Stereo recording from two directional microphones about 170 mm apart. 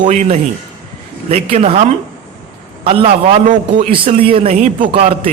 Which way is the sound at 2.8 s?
35° right (ahead or behind).